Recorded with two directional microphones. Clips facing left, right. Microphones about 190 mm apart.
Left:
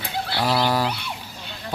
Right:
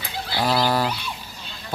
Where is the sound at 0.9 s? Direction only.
60° left (ahead or behind).